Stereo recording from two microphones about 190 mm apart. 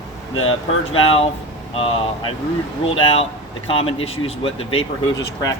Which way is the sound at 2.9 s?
30° left (ahead or behind).